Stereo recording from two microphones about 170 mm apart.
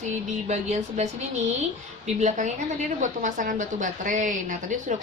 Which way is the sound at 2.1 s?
45° right (ahead or behind).